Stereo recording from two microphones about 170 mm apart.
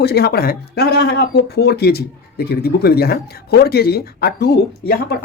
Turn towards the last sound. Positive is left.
turn(degrees=70)  # may be behind; listen again after turning